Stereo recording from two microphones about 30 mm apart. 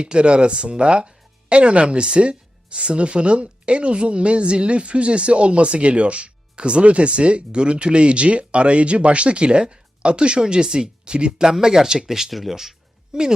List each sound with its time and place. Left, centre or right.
0.0 s speech: right; by 12.7 s centre
13.1 s a woman's voice: right